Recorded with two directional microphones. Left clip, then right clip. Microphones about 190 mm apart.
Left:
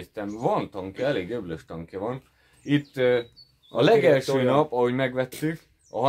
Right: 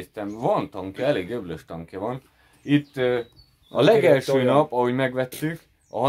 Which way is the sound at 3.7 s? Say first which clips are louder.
Right 2 dB; 30° right (ahead or behind).